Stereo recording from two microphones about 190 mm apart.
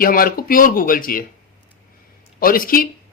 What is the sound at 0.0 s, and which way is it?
A man's voice, 50° left (ahead or behind).